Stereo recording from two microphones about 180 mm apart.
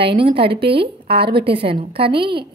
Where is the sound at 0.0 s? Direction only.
30° right (ahead or behind).